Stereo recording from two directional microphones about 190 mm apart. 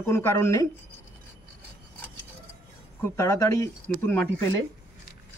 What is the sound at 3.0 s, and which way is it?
Speech, 15° left (ahead or behind).